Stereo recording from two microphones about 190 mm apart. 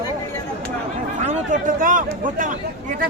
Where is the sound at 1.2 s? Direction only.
40° right (ahead or behind).